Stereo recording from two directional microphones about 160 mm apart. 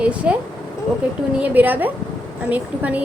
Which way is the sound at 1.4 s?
10° right (ahead or behind).